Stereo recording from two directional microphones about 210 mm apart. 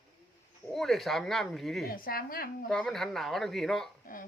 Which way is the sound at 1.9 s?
45° left (ahead or behind).